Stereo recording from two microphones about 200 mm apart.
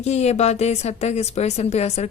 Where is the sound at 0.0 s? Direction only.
35° left (ahead or behind).